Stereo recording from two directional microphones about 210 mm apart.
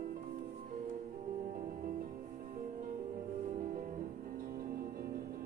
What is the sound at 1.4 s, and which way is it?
Music, 40° right (ahead or behind).